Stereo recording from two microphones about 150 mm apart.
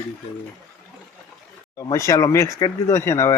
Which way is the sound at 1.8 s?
20° left (ahead or behind).